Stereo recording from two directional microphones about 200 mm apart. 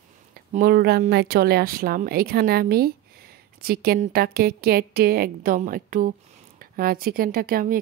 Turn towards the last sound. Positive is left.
turn(degrees=-45)  # may be behind; listen again after turning